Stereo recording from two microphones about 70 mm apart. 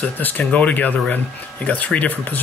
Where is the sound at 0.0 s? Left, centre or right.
Left.